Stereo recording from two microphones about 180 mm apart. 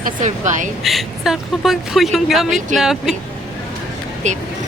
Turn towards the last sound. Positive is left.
turn(degrees=-40)  # may be behind; listen again after turning